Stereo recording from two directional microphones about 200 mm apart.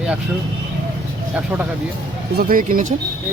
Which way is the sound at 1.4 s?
10° right (ahead or behind).